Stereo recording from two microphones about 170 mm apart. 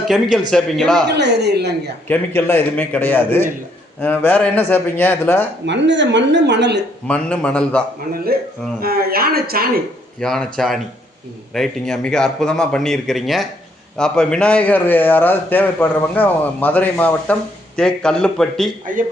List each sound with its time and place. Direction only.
0.1 s speech: centre (ahead or behind)
1.1 s speech: 80° right
2.0 s a man's voice: 10° left (ahead or behind)
5.6 s speech: 90° right
7.1 s a man's voice: 5° left (ahead or behind)
8.1 s speech: 65° right (ahead or behind)
10.2 s a man's voice: 5° left (ahead or behind)